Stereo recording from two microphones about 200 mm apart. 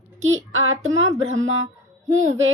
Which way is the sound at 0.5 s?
75° right (ahead or behind).